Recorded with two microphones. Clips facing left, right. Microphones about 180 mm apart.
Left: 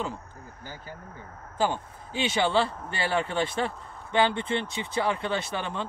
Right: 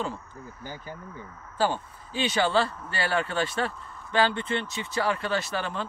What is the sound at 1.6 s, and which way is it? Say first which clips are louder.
Speech: right 1 dB; 15° left (ahead or behind).